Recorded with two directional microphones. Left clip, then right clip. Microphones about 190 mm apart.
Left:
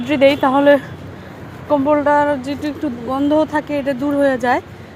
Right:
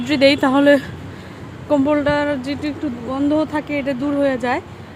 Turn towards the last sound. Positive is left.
turn(degrees=5)  # may be behind; listen again after turning